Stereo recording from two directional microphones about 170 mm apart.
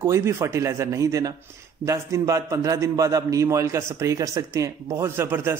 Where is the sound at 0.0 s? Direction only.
15° right (ahead or behind).